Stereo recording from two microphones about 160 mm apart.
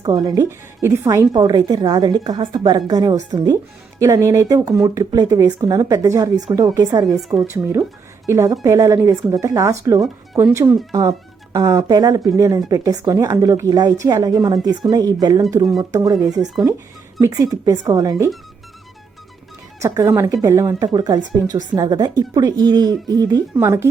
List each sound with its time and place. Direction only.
0.0 s a woman's voice: 25° right (ahead or behind)
7.2 s speech: centre (ahead or behind)
7.4 s a woman's voice: 15° right (ahead or behind)
19.8 s a woman's voice: 20° right (ahead or behind)